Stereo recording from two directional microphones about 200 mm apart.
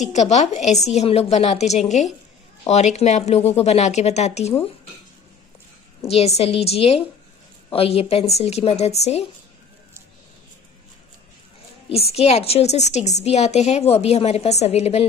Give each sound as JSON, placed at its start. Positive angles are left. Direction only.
{"t": 0.1, "sound": "speech", "side_deg": 35}
{"t": 6.0, "sound": "speech", "side_deg": 30}
{"t": 11.9, "sound": "speech", "side_deg": 30}